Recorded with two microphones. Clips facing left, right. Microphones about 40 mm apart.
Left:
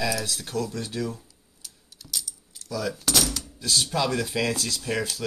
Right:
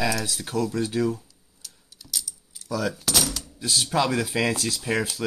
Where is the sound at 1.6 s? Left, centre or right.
Centre.